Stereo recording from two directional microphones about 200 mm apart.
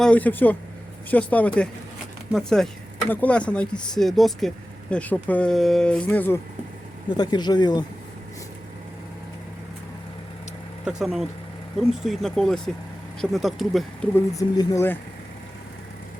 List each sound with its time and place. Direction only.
0.0 s speech: 5° left (ahead or behind)
7.2 s speech: 20° left (ahead or behind)
10.8 s speech: 5° right (ahead or behind)
14.3 s speech: 20° left (ahead or behind)